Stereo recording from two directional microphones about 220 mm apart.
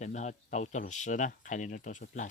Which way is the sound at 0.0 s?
30° left (ahead or behind).